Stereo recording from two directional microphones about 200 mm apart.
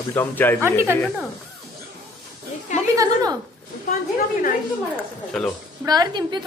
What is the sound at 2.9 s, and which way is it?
Speech, 15° right (ahead or behind).